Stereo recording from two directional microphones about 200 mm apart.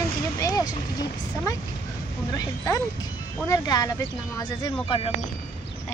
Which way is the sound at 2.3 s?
15° left (ahead or behind).